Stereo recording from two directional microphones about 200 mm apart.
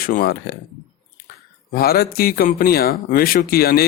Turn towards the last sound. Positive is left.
turn(degrees=50)  # may be behind; listen again after turning